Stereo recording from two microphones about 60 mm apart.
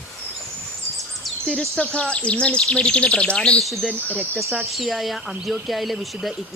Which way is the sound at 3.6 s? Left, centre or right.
Centre.